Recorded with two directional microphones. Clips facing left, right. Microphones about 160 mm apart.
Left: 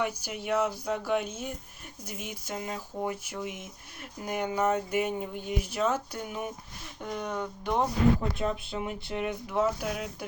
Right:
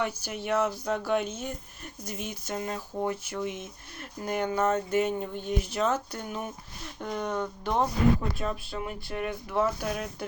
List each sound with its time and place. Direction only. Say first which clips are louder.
0.0 s speech: even; 10° left (ahead or behind)
8.4 s speech: left 2 dB; 20° left (ahead or behind)